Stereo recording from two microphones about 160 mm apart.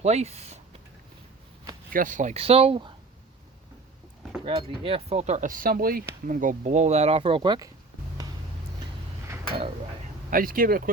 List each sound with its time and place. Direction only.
0.0 s speech: 40° right (ahead or behind)
1.9 s speech: 55° right (ahead or behind); by 2.9 s 35° right (ahead or behind)
4.4 s speech: 35° right (ahead or behind)
10.3 s speech: 60° right (ahead or behind)